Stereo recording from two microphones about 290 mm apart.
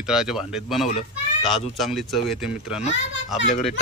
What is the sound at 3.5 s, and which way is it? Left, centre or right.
Speech, left.